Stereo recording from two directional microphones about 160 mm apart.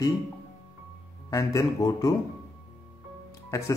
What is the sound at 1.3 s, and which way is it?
Speech, 20° left (ahead or behind).